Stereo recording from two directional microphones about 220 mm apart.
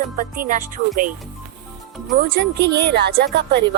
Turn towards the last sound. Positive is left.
turn(degrees=-50)  # may be behind; listen again after turning